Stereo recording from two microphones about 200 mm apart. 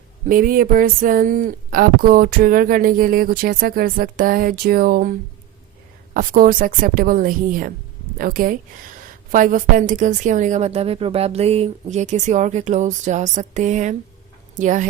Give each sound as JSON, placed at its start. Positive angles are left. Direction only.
{"t": 0.3, "sound": "speech", "side_deg": -45}
{"t": 6.1, "sound": "a woman's voice", "side_deg": -45}